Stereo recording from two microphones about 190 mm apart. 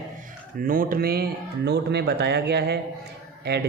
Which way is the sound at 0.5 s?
50° right (ahead or behind).